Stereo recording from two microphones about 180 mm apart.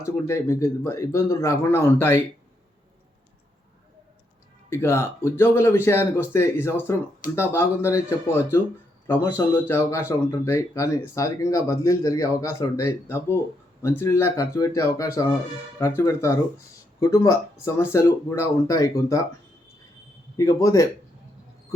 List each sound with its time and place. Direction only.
0.0 s speech: 15° left (ahead or behind)
4.7 s speech: 15° left (ahead or behind)
9.6 s speech: 15° left (ahead or behind)
20.3 s speech: 20° left (ahead or behind)